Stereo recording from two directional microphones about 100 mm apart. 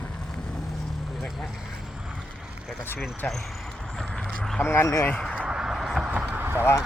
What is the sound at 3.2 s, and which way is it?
Speech, 15° left (ahead or behind).